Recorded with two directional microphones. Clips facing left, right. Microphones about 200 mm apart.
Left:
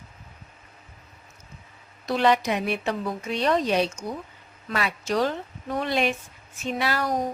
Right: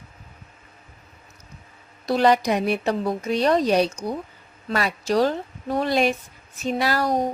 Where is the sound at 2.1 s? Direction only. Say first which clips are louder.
Right 3 dB; 40° right (ahead or behind).